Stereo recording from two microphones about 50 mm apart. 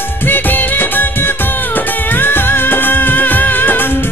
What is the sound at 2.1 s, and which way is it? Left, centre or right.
Music of bollywood, left.